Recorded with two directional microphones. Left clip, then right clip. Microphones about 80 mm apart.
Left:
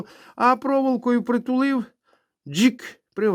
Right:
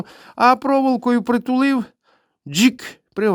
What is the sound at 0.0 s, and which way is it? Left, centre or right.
Speech, right.